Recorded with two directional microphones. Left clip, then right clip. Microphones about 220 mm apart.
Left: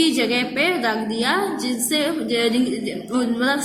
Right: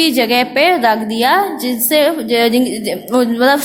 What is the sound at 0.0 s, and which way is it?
A woman's voice, 40° right (ahead or behind).